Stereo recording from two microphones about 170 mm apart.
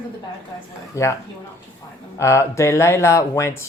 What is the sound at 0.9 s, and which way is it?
Speech, 15° left (ahead or behind).